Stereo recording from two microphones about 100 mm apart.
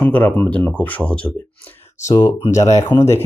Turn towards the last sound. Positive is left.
turn(degrees=35)  # may be behind; listen again after turning